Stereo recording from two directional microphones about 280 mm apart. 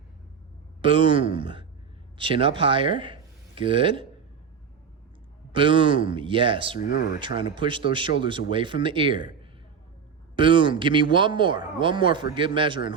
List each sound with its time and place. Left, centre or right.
0.8 s speech: centre
5.5 s speech: centre
6.7 s speech: left
7.2 s speech: centre